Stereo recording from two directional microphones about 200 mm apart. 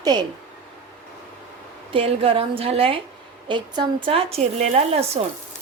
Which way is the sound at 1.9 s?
25° right (ahead or behind).